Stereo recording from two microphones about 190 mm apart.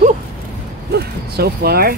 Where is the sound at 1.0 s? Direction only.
55° right (ahead or behind).